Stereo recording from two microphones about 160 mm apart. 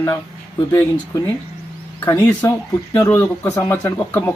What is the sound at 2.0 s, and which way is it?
Speech, 20° left (ahead or behind).